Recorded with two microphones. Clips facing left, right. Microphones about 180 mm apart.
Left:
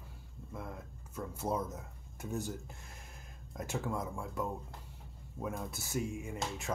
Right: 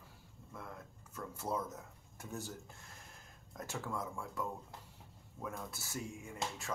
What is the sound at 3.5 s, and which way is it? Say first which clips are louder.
Speech: left 5 dB; 15° left (ahead or behind).